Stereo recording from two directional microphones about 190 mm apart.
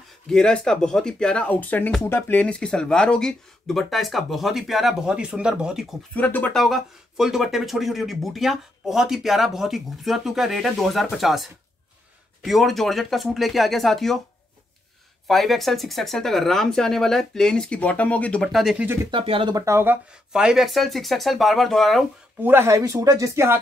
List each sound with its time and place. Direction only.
0.3 s speech: 5° left (ahead or behind)
6.1 s speech: 10° left (ahead or behind)
15.2 s speech: centre (ahead or behind)
19.0 s speech: 30° right (ahead or behind); by 22.0 s centre (ahead or behind)
22.4 s speech: 10° right (ahead or behind)